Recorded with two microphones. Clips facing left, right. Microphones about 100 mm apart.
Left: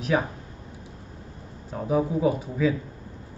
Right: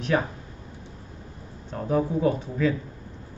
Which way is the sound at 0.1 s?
5° left (ahead or behind).